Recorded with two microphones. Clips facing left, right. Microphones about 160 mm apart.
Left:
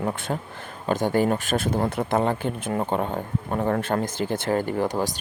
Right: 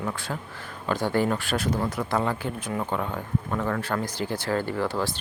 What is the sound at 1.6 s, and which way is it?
Speech, 55° left (ahead or behind).